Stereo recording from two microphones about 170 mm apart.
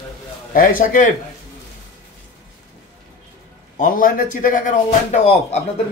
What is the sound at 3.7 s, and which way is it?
A man's voice, 55° left (ahead or behind).